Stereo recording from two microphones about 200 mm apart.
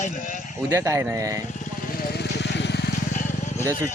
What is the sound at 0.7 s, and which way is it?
Speech, 15° right (ahead or behind).